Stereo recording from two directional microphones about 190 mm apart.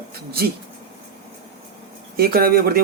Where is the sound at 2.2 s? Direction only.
50° right (ahead or behind).